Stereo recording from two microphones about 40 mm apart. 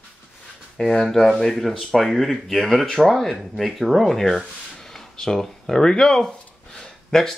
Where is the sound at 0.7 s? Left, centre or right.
Centre.